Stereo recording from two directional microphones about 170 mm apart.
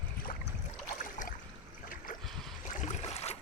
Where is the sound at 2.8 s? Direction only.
40° left (ahead or behind).